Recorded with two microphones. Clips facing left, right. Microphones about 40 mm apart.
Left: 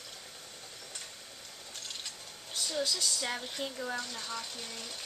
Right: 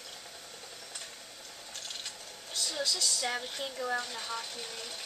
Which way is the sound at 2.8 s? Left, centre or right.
Left.